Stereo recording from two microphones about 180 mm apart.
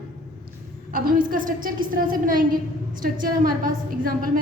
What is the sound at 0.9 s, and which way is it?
A woman's voice, 50° right (ahead or behind).